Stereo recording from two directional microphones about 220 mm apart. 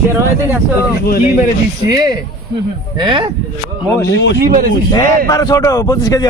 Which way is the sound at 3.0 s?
20° right (ahead or behind).